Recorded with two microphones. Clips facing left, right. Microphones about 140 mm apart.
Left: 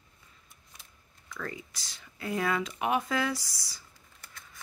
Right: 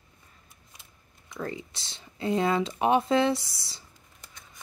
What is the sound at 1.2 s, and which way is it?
Speech, 25° right (ahead or behind).